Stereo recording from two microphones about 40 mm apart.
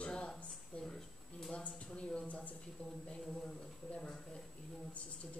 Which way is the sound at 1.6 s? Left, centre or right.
Left.